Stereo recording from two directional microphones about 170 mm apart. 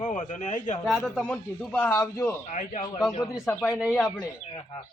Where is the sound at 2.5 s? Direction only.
45° left (ahead or behind).